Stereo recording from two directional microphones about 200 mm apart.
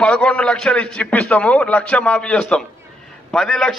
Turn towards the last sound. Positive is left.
turn(degrees=0)  # may be behind; listen again after turning